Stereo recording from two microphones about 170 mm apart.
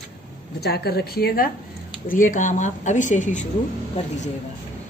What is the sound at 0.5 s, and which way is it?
Speech, 70° left (ahead or behind).